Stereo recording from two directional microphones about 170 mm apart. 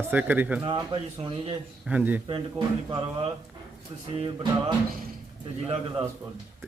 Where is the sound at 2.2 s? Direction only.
30° right (ahead or behind).